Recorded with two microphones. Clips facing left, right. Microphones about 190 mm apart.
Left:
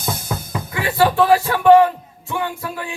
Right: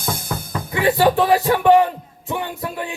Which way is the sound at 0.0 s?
10° left (ahead or behind).